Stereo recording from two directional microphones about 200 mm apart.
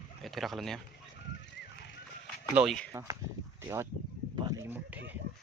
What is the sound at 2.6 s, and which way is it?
Speech, centre (ahead or behind).